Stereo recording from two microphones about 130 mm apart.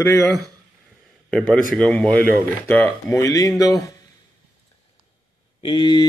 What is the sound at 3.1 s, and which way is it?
Speech, 25° left (ahead or behind).